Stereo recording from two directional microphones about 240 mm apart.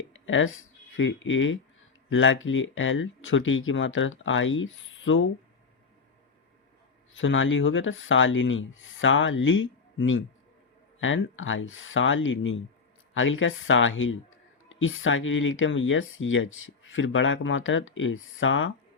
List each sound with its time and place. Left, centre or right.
0.1 s speech: left
7.1 s speech: left